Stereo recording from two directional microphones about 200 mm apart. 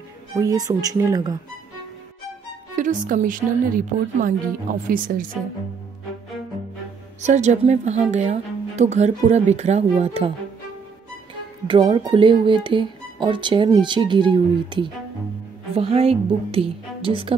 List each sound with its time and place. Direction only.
0.4 s a woman's voice: 20° right (ahead or behind)
2.7 s a woman's voice: 40° right (ahead or behind)
7.2 s a woman's voice: 35° right (ahead or behind)
11.6 s speech: 25° right (ahead or behind)